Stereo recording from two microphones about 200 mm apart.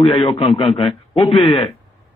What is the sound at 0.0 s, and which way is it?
A man's voice, 25° left (ahead or behind).